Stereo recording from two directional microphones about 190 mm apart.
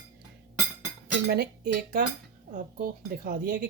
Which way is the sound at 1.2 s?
55° right (ahead or behind).